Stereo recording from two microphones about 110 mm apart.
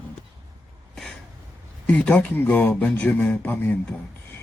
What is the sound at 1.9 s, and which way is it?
Speech, 10° left (ahead or behind).